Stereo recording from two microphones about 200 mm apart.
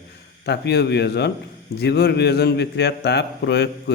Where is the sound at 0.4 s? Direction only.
55° left (ahead or behind).